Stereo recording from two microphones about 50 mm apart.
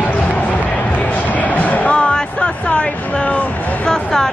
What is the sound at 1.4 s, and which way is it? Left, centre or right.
Music, left.